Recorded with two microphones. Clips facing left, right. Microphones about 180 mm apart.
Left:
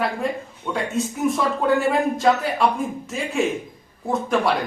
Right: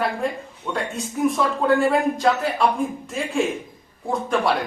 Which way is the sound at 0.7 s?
Centre (ahead or behind).